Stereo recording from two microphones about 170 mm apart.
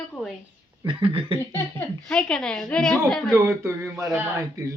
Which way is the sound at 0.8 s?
30° right (ahead or behind).